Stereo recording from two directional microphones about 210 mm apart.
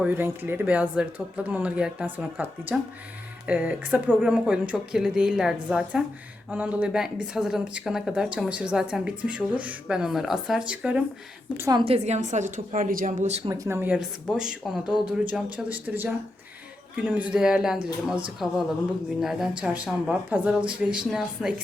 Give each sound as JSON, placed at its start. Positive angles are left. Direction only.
{"t": 0.0, "sound": "a woman's voice", "side_deg": -10}
{"t": 13.5, "sound": "speech", "side_deg": -10}